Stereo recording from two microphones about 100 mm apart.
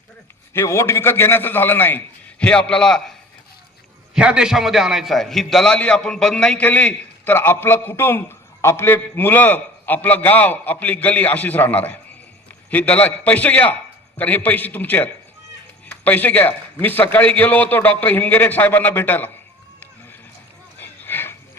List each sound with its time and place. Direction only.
0.5 s a man's voice: 25° left (ahead or behind)
2.4 s a man's voice: 10° left (ahead or behind)
4.1 s a man's voice: 10° right (ahead or behind); by 19.3 s 20° left (ahead or behind)
20.7 s a sound: 20° left (ahead or behind)